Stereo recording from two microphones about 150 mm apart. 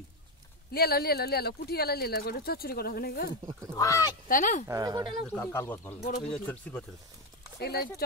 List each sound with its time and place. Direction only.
0.7 s speech: 90° left
3.7 s speech: 25° left (ahead or behind)
4.3 s speech: 60° left (ahead or behind)
4.6 s speech: 25° right (ahead or behind)
5.3 s speech: 15° left (ahead or behind)
5.9 s speech: 65° left (ahead or behind)
6.2 s speech: 5° left (ahead or behind)
7.6 s speech: 90° left